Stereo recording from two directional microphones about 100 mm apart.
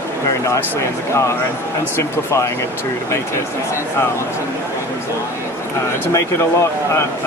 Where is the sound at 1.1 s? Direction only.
30° left (ahead or behind).